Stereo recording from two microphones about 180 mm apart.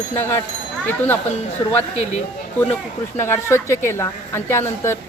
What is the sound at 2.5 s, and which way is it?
Speech, 10° left (ahead or behind).